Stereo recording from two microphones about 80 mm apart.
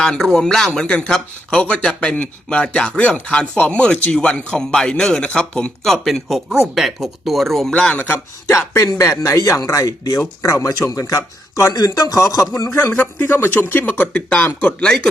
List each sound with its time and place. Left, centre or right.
0.0 s speech: centre
7.7 s speech: centre
8.0 s speech: left
8.5 s speech: left
13.0 s speech: left